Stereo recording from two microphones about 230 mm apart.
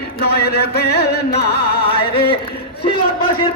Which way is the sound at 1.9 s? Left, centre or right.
Left.